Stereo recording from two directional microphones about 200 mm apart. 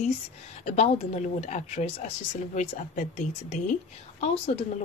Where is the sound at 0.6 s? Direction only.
30° left (ahead or behind).